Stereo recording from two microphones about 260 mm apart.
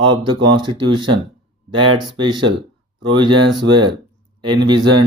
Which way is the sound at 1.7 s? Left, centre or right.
Centre.